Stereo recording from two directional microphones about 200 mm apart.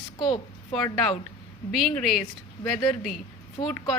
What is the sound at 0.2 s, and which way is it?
Speech, 25° left (ahead or behind).